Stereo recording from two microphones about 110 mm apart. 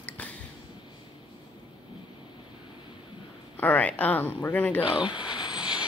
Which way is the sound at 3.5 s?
15° left (ahead or behind).